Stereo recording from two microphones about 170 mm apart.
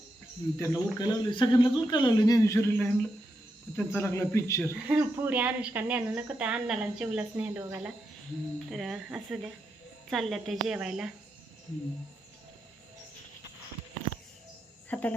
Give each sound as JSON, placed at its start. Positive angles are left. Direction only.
{"t": 0.6, "sound": "speech", "side_deg": 20}
{"t": 4.7, "sound": "speech", "side_deg": -10}
{"t": 8.7, "sound": "a woman's voice", "side_deg": 0}
{"t": 14.9, "sound": "cricket", "side_deg": 5}